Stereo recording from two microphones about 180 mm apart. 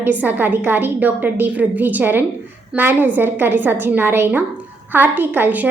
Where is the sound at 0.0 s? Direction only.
10° right (ahead or behind).